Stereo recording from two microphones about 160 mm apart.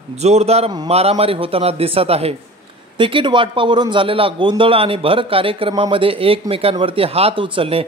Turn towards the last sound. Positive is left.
turn(degrees=-35)  # may be behind; listen again after turning